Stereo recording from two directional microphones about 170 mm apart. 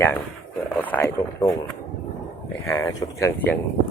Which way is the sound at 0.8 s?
10° left (ahead or behind).